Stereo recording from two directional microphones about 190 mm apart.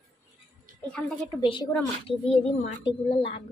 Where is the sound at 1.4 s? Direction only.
25° left (ahead or behind).